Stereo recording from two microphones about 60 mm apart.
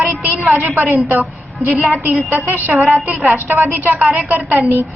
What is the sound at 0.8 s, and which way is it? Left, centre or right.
A woman's voice, right.